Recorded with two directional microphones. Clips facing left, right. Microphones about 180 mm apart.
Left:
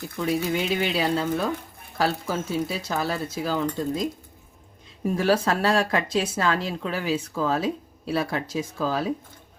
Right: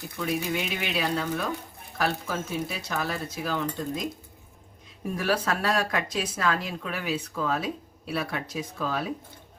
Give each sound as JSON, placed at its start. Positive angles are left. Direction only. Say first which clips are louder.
{"t": 0.5, "sound": "speech", "louder": "left 5 dB", "side_deg": 35}
{"t": 5.1, "sound": "speech", "louder": "left 5 dB", "side_deg": 30}